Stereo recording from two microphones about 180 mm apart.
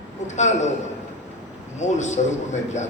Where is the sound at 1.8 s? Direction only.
40° left (ahead or behind).